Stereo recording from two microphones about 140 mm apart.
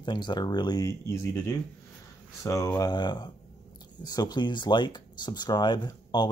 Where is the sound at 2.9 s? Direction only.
30° left (ahead or behind).